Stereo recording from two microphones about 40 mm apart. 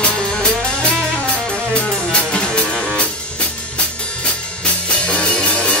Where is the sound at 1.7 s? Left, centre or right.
Left.